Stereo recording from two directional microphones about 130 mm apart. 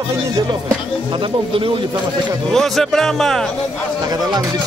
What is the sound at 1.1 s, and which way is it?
Speech, 40° right (ahead or behind).